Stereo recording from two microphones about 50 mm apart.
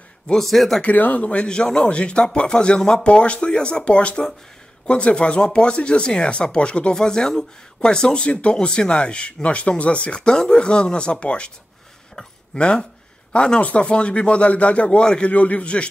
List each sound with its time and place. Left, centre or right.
0.3 s speech: centre
0.8 s speech: left
12.5 s speech: left
15.3 s speech: left